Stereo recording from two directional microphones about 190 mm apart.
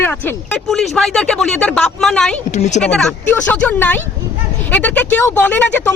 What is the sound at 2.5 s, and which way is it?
Speech, 35° left (ahead or behind).